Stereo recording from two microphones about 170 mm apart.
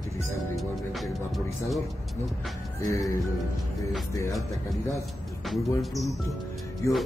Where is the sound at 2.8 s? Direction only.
20° left (ahead or behind).